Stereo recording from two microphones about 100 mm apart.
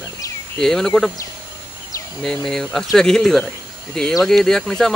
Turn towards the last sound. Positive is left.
turn(degrees=5)  # may be behind; listen again after turning